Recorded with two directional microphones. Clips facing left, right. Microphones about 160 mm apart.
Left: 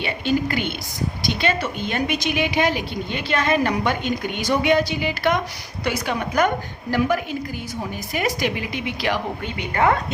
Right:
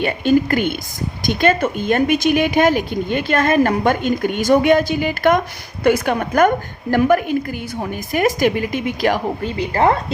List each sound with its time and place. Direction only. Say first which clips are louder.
0.0 s a woman's voice: right 6 dB; 50° right (ahead or behind); by 10.0 s 30° right (ahead or behind)